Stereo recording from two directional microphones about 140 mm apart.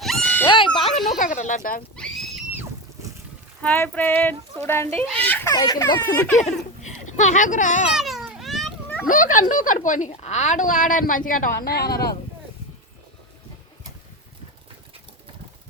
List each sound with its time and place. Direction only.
0.0 s screaming: 5° left (ahead or behind)
0.4 s a sound: 35° left (ahead or behind)
1.2 s a sound: 65° left (ahead or behind)
2.0 s neigh: centre (ahead or behind)
3.6 s a sound: 10° left (ahead or behind)
5.5 s speech: 25° left (ahead or behind)
6.8 s speech: 60° left (ahead or behind)
7.9 s children playing: centre (ahead or behind)
9.0 s speech: 70° left (ahead or behind); by 12.1 s 90° left